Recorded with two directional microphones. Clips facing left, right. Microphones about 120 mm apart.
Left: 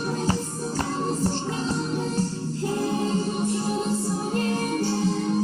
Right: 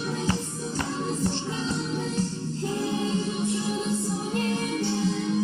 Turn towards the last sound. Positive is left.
turn(degrees=45)  # may be behind; listen again after turning